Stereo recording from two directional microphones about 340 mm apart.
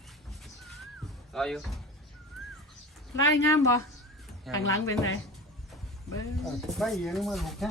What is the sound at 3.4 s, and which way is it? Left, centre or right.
A woman's voice, centre.